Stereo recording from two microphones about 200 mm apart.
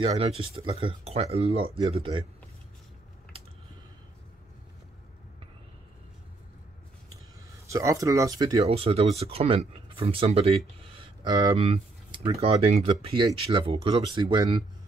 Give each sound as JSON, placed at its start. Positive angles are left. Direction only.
{"t": 0.0, "sound": "speech", "side_deg": -30}
{"t": 7.6, "sound": "speech", "side_deg": -15}
{"t": 8.6, "sound": "speech", "side_deg": -30}